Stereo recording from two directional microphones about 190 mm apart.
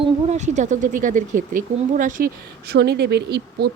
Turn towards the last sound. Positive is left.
turn(degrees=-60)  # may be behind; listen again after turning